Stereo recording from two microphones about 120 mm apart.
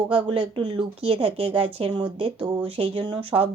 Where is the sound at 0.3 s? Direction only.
50° right (ahead or behind).